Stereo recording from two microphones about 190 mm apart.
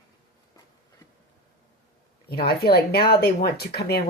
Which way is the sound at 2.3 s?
55° left (ahead or behind).